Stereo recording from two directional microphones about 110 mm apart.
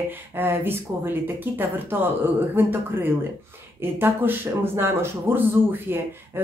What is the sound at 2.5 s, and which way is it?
Speech, 20° right (ahead or behind).